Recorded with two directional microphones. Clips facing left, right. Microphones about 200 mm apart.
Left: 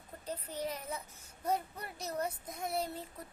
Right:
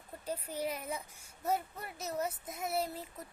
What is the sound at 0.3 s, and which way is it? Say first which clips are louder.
A child's voice: right 2 dB; 10° right (ahead or behind).